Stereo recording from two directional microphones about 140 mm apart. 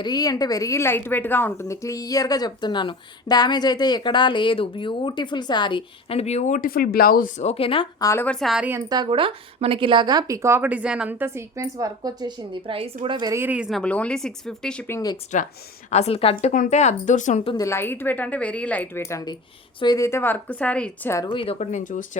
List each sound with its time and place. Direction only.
0.0 s a woman's voice: 30° left (ahead or behind)
7.9 s a woman's voice: 25° left (ahead or behind)
8.2 s speech: 5° left (ahead or behind)
9.0 s a woman's voice: 40° right (ahead or behind)
13.3 s speech: 15° right (ahead or behind); by 14.8 s 5° left (ahead or behind)
14.8 s a woman's voice: 20° left (ahead or behind)
15.3 s speech: 65° left (ahead or behind)
15.9 s speech: 50° left (ahead or behind)
16.5 s speech: 65° left (ahead or behind)
17.6 s a woman's voice: 20° left (ahead or behind)
21.2 s speech: 40° left (ahead or behind); by 22.0 s 65° left (ahead or behind)